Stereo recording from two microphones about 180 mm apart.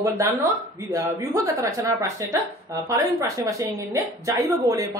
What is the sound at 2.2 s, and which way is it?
A woman's voice, 15° right (ahead or behind).